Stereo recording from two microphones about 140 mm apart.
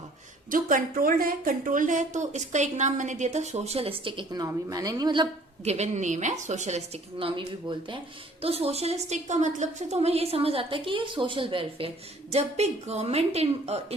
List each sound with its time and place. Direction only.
0.5 s a woman's voice: 80° right; by 5.3 s 30° right (ahead or behind)
5.6 s a woman's voice: 55° right (ahead or behind)
12.3 s a woman's voice: 50° right (ahead or behind)